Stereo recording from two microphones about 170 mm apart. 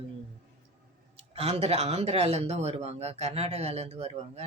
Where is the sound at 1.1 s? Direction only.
35° right (ahead or behind).